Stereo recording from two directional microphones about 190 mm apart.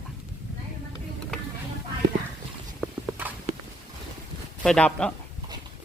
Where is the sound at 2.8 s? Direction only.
5° right (ahead or behind).